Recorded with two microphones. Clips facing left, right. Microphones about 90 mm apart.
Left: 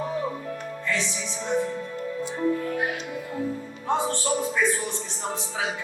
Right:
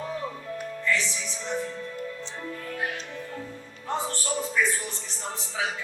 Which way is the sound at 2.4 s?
20° left (ahead or behind).